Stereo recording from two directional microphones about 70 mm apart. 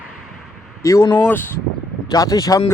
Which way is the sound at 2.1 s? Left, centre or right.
Left.